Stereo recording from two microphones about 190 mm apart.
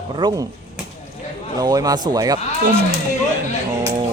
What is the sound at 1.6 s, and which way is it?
Speech, 20° right (ahead or behind).